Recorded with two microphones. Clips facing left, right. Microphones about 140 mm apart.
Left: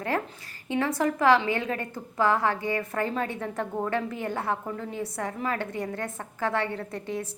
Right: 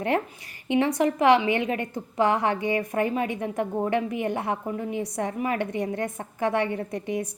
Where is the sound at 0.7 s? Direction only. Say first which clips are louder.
Right 4 dB; 20° right (ahead or behind).